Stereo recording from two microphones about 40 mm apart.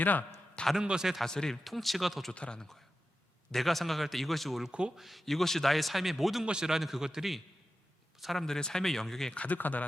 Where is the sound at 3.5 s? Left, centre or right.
Centre.